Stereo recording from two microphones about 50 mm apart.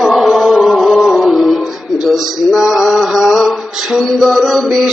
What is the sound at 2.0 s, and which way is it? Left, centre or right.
Male singing, centre.